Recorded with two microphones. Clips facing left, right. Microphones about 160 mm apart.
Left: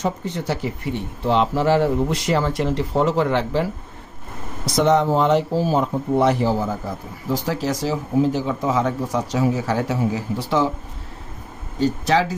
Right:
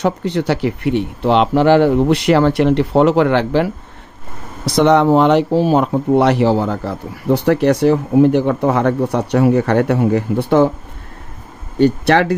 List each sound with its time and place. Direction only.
0.0 s speech: 75° right (ahead or behind); by 10.7 s 55° right (ahead or behind)
11.8 s speech: 65° right (ahead or behind)